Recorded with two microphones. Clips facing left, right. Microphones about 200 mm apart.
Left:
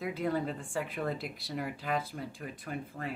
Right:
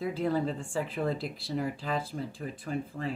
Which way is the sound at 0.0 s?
30° right (ahead or behind).